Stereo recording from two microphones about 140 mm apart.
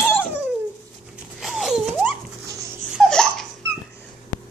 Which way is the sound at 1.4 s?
Centre (ahead or behind).